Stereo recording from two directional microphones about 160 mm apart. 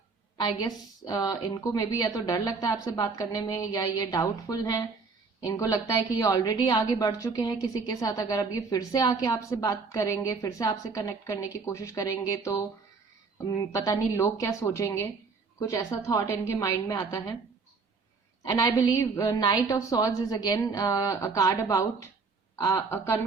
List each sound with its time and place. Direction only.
0.3 s a woman's voice: 25° left (ahead or behind)
18.4 s a woman's voice: 20° left (ahead or behind)